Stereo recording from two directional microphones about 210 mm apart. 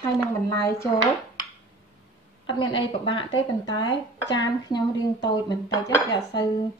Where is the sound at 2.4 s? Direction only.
20° left (ahead or behind).